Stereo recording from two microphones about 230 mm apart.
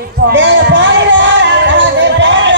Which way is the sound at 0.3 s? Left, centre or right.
Right.